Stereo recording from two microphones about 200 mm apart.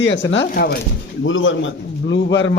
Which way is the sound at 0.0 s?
65° left (ahead or behind).